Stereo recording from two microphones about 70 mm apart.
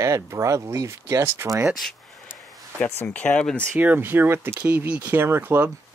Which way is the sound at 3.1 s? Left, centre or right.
Left.